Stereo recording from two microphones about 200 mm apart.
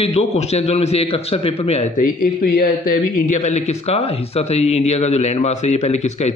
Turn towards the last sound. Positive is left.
turn(degrees=35)  # may be behind; listen again after turning